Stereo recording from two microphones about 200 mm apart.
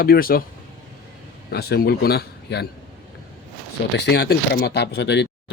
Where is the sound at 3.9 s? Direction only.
55° left (ahead or behind).